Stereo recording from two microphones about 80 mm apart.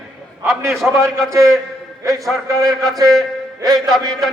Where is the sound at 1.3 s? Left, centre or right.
Right.